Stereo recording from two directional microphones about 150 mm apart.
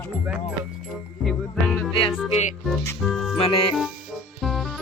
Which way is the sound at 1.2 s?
5° left (ahead or behind).